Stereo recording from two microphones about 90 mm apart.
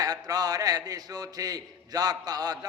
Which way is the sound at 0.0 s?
45° right (ahead or behind).